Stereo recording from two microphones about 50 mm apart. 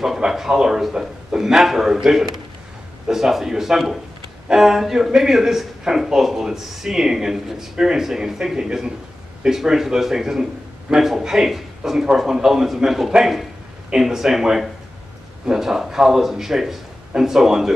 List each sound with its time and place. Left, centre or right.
0.3 s speech: centre